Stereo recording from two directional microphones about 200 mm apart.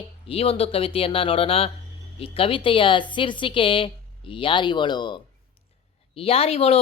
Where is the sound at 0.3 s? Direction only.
30° left (ahead or behind).